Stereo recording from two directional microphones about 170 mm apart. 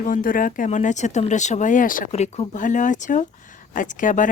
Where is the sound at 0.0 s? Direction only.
55° left (ahead or behind).